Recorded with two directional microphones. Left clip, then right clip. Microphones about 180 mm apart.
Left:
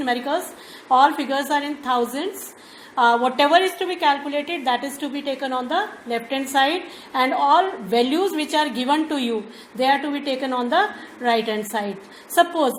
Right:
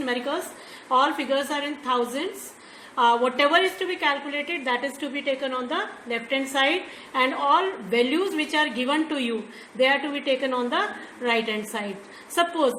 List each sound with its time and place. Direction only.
0.0 s a woman's voice: 40° left (ahead or behind)